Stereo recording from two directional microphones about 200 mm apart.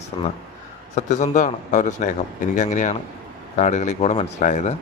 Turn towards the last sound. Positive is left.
turn(degrees=35)  # may be behind; listen again after turning